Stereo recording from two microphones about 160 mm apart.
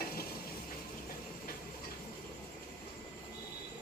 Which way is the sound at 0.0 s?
70° left (ahead or behind).